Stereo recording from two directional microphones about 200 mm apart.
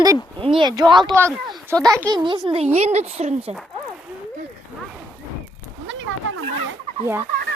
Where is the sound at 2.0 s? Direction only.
20° right (ahead or behind).